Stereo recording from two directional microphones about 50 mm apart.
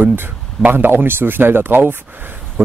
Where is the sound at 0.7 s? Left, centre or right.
Right.